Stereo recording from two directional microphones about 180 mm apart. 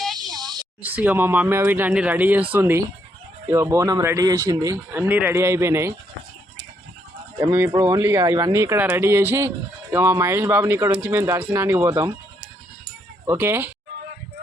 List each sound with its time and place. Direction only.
0.3 s a sound: 20° right (ahead or behind)
0.8 s speech: 10° right (ahead or behind)
7.3 s speech: 15° right (ahead or behind)
13.2 s speech: 10° right (ahead or behind)